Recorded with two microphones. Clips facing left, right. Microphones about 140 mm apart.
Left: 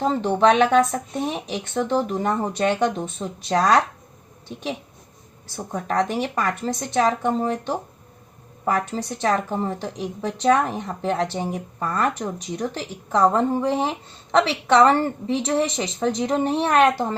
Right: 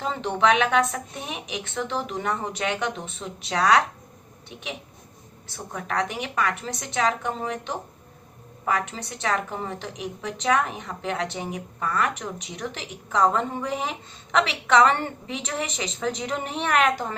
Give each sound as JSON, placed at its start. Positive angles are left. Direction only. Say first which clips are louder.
{"t": 0.0, "sound": "speech", "louder": "left 5 dB", "side_deg": 35}
{"t": 5.5, "sound": "speech", "louder": "left 5 dB", "side_deg": 30}